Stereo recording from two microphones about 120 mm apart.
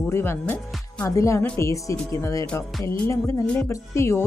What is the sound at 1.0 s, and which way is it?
Speech, 25° left (ahead or behind).